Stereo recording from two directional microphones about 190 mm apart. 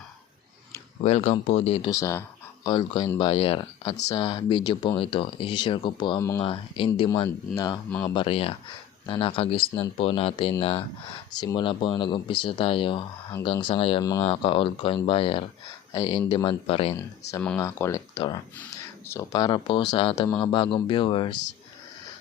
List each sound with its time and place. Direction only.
1.0 s speech: 35° left (ahead or behind)
1.9 s speech: 15° left (ahead or behind)
7.9 s speech: 10° left (ahead or behind)
8.1 s speech: 25° left (ahead or behind)
17.6 s speech: 15° left (ahead or behind)
19.0 s speech: 10° left (ahead or behind)
19.4 s speech: 25° left (ahead or behind)